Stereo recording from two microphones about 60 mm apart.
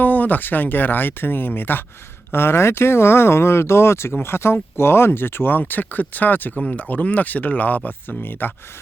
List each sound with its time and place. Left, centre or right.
0.0 s speech: left